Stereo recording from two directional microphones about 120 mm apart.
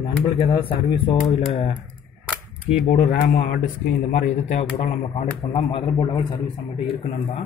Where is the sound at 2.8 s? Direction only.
80° left.